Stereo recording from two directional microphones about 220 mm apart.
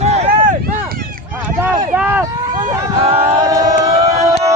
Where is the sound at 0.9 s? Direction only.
40° right (ahead or behind).